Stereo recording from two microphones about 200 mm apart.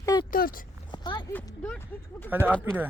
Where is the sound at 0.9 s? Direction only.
20° left (ahead or behind).